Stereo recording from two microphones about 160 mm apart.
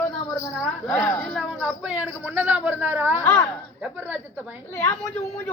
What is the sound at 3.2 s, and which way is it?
Speech, 20° left (ahead or behind).